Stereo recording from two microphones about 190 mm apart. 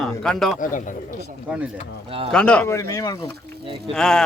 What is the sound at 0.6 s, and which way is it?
Speech, 45° left (ahead or behind).